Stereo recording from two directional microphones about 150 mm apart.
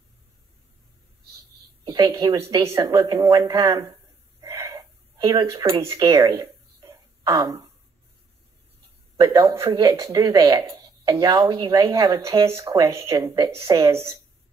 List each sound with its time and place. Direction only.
1.9 s speech: 35° right (ahead or behind)
2.5 s speech: 20° right (ahead or behind)
4.6 s a sound: 35° right (ahead or behind)
5.8 s speech: 20° right (ahead or behind)
6.0 s speech: 35° right (ahead or behind)
6.8 s a sound: 25° right (ahead or behind)
9.1 s a man's voice: 25° right (ahead or behind)
9.6 s speech: 35° right (ahead or behind)
12.4 s speech: 20° right (ahead or behind)